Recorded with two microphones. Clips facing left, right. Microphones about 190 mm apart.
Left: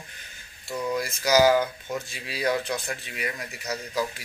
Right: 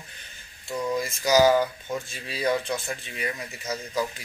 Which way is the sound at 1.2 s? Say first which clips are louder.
Right 1 dB; 20° right (ahead or behind).